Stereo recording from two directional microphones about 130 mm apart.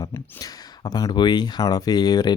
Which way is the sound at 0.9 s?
30° left (ahead or behind).